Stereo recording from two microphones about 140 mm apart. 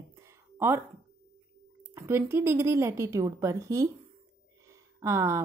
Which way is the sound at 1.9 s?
20° right (ahead or behind).